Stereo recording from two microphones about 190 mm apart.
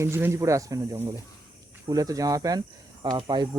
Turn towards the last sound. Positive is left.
turn(degrees=-25)  # may be behind; listen again after turning